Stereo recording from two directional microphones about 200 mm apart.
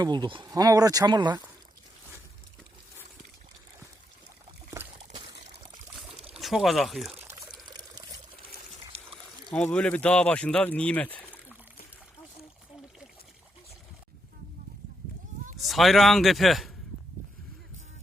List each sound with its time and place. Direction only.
0.0 s speech: 20° right (ahead or behind)
4.8 s a sound: 15° right (ahead or behind)
5.1 s trickle: 25° right (ahead or behind)
6.0 s pour: centre (ahead or behind)
9.6 s speech: 5° left (ahead or behind)
15.6 s a man's voice: centre (ahead or behind)